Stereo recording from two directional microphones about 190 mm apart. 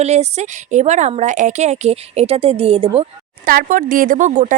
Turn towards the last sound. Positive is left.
turn(degrees=-40)  # may be behind; listen again after turning